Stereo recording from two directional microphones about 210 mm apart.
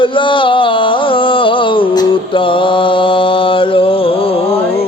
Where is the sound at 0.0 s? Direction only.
25° left (ahead or behind).